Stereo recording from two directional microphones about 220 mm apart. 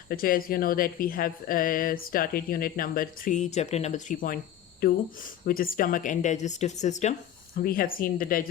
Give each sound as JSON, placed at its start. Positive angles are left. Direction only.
{"t": 0.1, "sound": "speech", "side_deg": 40}